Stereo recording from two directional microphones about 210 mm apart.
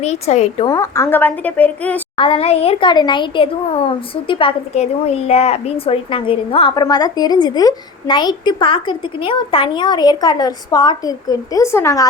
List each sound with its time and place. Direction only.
0.0 s a woman's voice: 30° left (ahead or behind)
0.7 s a woman's voice: 15° left (ahead or behind)
2.1 s speech: 25° left (ahead or behind)